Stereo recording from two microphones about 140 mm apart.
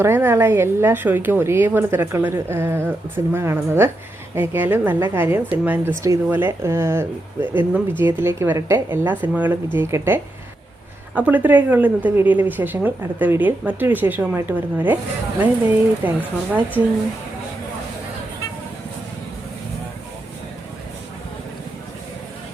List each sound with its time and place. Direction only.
0.0 s a woman's voice: 15° right (ahead or behind)